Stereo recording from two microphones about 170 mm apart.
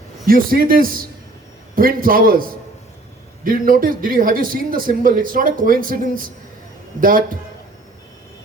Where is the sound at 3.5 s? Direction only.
55° right (ahead or behind).